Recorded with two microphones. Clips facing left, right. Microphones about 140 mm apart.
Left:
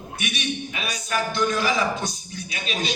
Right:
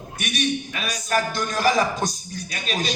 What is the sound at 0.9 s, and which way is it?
A man's voice, 45° right (ahead or behind).